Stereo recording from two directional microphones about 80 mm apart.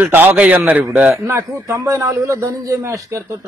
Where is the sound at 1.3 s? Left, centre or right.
Right.